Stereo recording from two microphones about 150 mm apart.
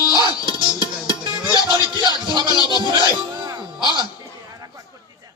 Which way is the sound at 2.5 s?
25° left (ahead or behind).